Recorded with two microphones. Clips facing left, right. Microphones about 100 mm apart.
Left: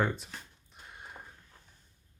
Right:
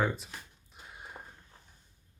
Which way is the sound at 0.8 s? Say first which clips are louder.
Right 1 dB; centre (ahead or behind).